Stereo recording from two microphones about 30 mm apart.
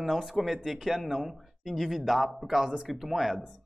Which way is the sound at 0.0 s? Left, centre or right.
Centre.